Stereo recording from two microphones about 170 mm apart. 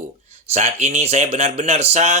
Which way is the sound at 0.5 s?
40° right (ahead or behind).